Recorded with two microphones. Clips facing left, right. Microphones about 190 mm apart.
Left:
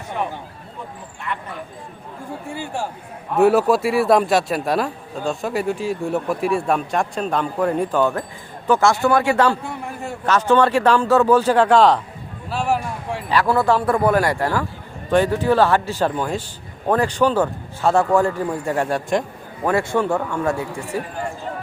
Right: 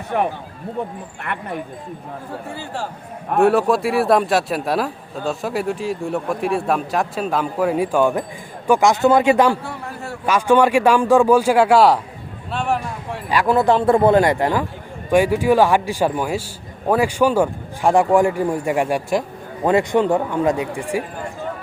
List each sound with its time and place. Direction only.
0.1 s speech: 55° right (ahead or behind)
2.6 s speech: 15° left (ahead or behind)
3.4 s a man's voice: centre (ahead or behind); by 9.6 s 15° right (ahead or behind)
9.6 s a sound: 15° left (ahead or behind)
10.2 s a man's voice: 10° right (ahead or behind)
12.5 s speech: centre (ahead or behind)
13.3 s a man's voice: 15° right (ahead or behind)